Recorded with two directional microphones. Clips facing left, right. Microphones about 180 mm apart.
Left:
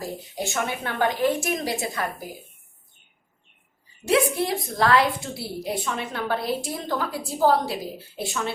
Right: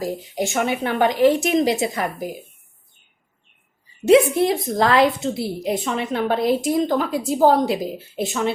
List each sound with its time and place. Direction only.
0.0 s a woman's voice: 20° right (ahead or behind)
4.0 s a woman's voice: 20° right (ahead or behind)